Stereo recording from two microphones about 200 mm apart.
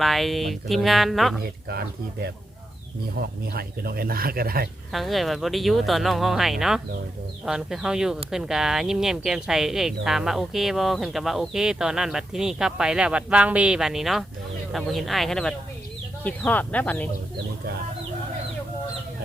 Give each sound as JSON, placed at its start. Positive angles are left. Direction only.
{"t": 0.0, "sound": "speech", "side_deg": 0}
{"t": 3.2, "sound": "speech", "side_deg": -50}
{"t": 4.9, "sound": "speech", "side_deg": 0}